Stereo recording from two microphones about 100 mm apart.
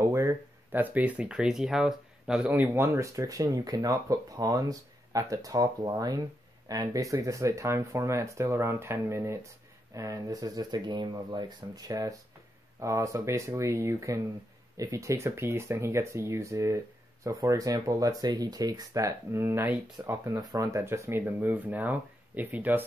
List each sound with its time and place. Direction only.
0.0 s a sound: 30° right (ahead or behind)
0.3 s speech: 15° right (ahead or behind)
2.5 s speech: 20° right (ahead or behind); by 19.1 s 35° right (ahead or behind)
19.3 s speech: 25° right (ahead or behind)
20.5 s speech: 30° right (ahead or behind)